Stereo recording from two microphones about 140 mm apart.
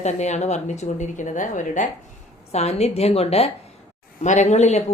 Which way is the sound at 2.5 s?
50° left (ahead or behind).